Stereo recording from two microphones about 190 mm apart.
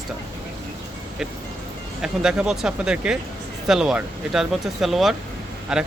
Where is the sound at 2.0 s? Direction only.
5° right (ahead or behind).